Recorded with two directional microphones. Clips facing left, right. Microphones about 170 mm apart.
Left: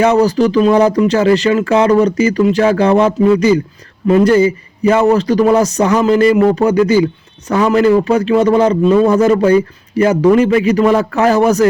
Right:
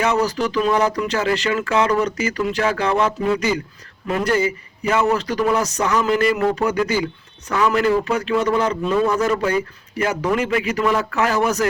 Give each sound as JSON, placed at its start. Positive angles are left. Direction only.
{"t": 0.0, "sound": "a man's voice", "side_deg": 30}